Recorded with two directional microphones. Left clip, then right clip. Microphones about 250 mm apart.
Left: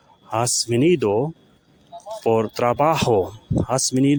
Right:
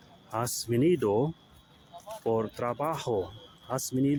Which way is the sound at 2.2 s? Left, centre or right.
Left.